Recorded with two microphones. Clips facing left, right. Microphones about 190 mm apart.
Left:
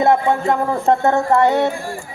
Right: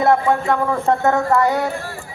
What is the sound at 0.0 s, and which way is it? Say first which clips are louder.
A man's voice: left 1 dB; 25° left (ahead or behind).